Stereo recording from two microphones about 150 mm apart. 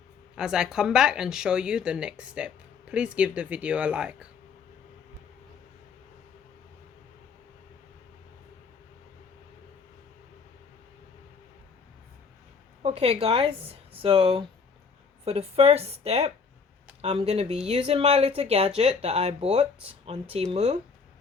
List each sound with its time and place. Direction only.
0.3 s speech: 5° right (ahead or behind)
12.8 s speech: 45° right (ahead or behind)